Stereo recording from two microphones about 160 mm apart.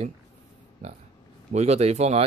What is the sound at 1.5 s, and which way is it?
Speech, 45° right (ahead or behind).